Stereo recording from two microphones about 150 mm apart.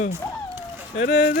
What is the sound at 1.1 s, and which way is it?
Speech, 70° left (ahead or behind).